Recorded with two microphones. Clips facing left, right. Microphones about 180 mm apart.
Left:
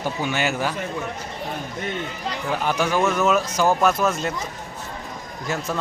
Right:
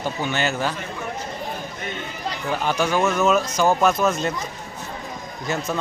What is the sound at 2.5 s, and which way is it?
Speech, 10° left (ahead or behind).